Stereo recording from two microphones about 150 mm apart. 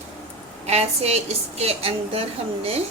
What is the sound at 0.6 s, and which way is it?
A woman's voice, 45° right (ahead or behind).